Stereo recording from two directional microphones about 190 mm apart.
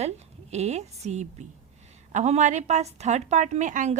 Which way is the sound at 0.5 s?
35° right (ahead or behind).